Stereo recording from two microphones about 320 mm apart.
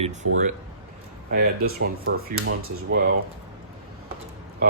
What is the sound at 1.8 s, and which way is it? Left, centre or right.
Speech, right.